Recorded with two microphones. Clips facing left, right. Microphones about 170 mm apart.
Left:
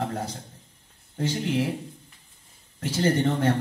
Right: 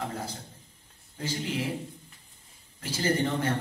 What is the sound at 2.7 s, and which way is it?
Speech, 65° left (ahead or behind).